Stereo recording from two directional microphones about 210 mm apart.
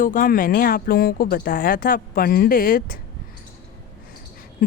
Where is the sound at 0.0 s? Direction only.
40° left (ahead or behind).